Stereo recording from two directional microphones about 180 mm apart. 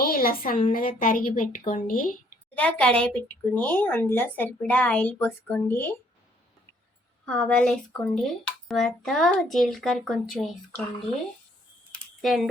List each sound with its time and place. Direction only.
0.0 s a woman's voice: 55° left (ahead or behind)
2.6 s a woman's voice: 5° left (ahead or behind)
7.3 s speech: 5° left (ahead or behind)
12.2 s speech: centre (ahead or behind)